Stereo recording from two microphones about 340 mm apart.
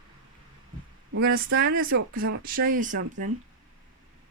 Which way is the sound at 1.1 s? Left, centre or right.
Right.